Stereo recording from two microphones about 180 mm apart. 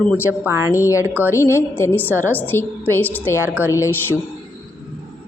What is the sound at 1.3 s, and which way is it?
A woman's voice, 15° left (ahead or behind).